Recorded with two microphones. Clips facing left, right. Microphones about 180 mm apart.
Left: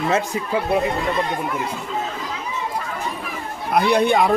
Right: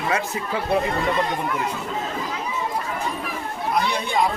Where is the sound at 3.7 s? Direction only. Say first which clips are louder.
Left 8 dB; 60° left (ahead or behind).